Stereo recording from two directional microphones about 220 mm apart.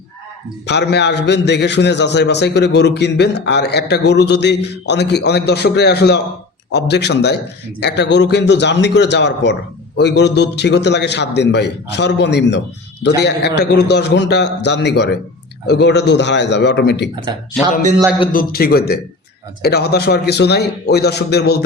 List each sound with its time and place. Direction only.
0.7 s a man's voice: 50° left (ahead or behind)
18.3 s a man's voice: 40° left (ahead or behind)